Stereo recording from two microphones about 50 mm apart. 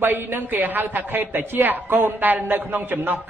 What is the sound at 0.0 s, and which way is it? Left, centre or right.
A man's voice, right.